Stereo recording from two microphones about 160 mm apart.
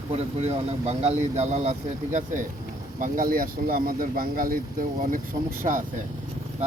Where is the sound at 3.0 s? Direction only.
60° right (ahead or behind).